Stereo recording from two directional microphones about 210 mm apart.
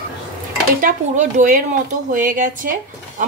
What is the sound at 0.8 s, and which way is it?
Speech, 35° right (ahead or behind).